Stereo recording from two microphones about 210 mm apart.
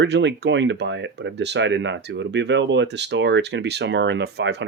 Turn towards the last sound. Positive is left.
turn(degrees=-55)  # may be behind; listen again after turning